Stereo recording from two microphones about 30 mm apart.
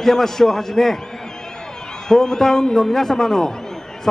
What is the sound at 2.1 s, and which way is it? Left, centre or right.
Speech, centre.